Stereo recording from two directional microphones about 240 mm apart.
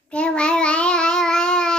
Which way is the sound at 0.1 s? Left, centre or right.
Centre.